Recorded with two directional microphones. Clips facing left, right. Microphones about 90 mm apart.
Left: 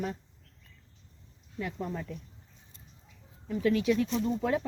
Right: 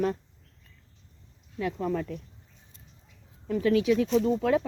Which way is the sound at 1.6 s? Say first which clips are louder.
Right 6 dB; 70° right (ahead or behind).